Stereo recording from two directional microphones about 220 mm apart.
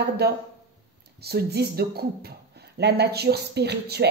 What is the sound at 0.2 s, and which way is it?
Speech, 45° right (ahead or behind).